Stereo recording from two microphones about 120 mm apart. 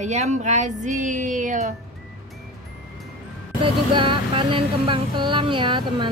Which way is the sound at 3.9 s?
45° right (ahead or behind).